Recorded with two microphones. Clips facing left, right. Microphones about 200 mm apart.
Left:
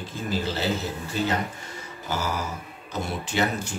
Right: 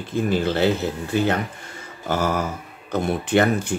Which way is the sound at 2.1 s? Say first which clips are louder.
Right 7 dB; 50° right (ahead or behind).